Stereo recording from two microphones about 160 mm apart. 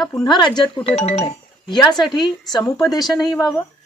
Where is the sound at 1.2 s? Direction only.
25° left (ahead or behind).